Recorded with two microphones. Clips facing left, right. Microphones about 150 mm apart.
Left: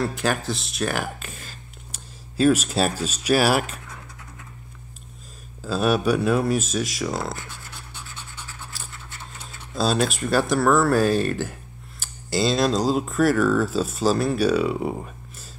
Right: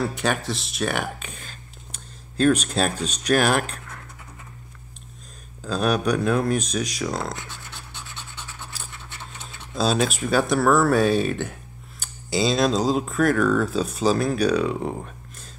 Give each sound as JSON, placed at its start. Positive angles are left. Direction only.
{"t": 0.0, "sound": "speech", "side_deg": 0}
{"t": 5.6, "sound": "speech", "side_deg": 5}
{"t": 7.3, "sound": "scratch", "side_deg": -25}
{"t": 8.7, "sound": "scratch", "side_deg": 0}
{"t": 9.8, "sound": "speech", "side_deg": 0}